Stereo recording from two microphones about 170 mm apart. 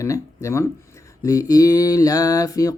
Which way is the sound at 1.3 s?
20° left (ahead or behind).